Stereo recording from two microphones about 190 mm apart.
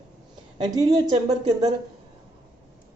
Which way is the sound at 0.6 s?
20° right (ahead or behind).